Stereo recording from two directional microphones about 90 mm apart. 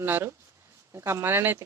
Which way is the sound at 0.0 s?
25° right (ahead or behind).